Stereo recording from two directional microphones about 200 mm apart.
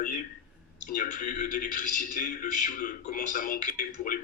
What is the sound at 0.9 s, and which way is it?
A man's voice, 40° left (ahead or behind).